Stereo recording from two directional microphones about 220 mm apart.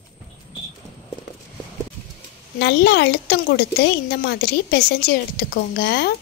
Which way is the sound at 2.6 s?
50° left (ahead or behind).